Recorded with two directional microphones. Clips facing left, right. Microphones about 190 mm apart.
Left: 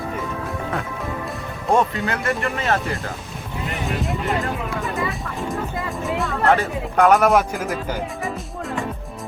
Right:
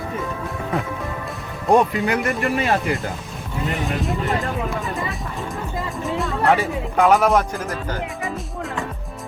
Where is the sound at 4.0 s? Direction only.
Centre (ahead or behind).